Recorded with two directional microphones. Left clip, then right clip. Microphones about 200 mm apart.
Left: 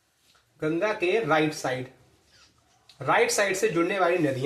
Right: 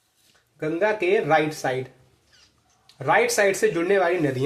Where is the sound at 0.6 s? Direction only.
50° right (ahead or behind).